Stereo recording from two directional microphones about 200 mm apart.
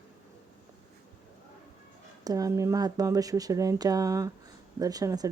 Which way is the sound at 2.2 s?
15° right (ahead or behind).